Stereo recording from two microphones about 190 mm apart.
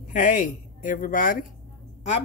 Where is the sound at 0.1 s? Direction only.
45° left (ahead or behind).